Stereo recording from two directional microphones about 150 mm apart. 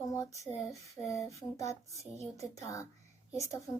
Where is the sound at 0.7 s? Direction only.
20° left (ahead or behind).